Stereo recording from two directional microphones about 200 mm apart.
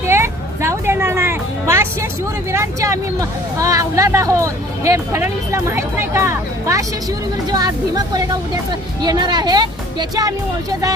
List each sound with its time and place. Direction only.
0.0 s music: 15° right (ahead or behind)
2.5 s speech: 15° right (ahead or behind)